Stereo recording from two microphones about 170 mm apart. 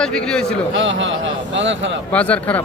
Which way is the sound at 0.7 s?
90° right.